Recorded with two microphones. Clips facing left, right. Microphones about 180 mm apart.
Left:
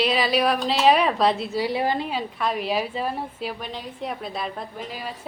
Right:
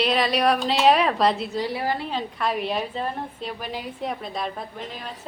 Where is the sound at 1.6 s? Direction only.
20° left (ahead or behind).